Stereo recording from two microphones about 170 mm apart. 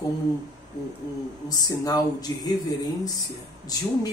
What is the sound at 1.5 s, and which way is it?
Speech, 20° left (ahead or behind).